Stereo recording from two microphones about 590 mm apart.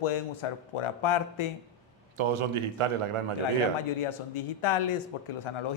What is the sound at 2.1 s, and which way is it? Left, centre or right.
A man's voice, right.